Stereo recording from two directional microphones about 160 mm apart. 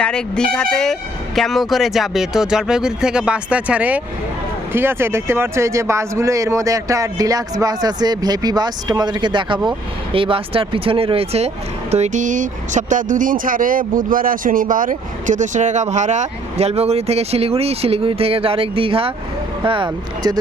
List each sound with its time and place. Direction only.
0.0 s a man's voice: 5° left (ahead or behind); by 20.4 s 30° right (ahead or behind)